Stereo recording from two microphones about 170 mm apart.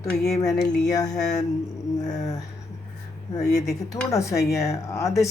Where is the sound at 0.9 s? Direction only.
20° left (ahead or behind).